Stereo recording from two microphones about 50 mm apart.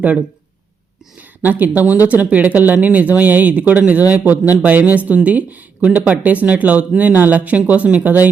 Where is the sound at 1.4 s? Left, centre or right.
Right.